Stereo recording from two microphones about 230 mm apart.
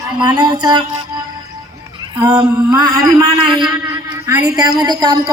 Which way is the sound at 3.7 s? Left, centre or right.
Centre.